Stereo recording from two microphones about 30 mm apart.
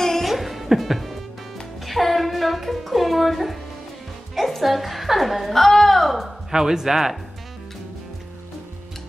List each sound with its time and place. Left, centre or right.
0.2 s music: centre
1.9 s a woman's voice: centre
6.5 s speech: centre